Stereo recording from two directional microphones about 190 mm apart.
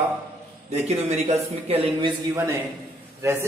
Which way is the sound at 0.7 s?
35° right (ahead or behind).